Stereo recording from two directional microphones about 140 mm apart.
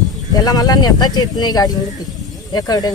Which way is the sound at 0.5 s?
25° left (ahead or behind).